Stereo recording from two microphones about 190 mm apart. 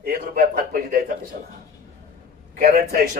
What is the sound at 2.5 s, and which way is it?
Speech, 50° right (ahead or behind).